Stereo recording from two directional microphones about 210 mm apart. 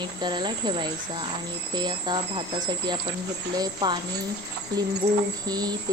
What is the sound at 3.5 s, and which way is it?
Speech, 20° right (ahead or behind).